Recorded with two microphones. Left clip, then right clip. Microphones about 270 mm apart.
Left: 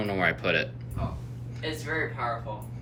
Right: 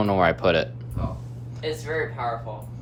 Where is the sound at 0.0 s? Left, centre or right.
Centre.